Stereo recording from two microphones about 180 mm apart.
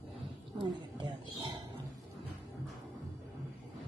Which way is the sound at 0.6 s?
25° right (ahead or behind).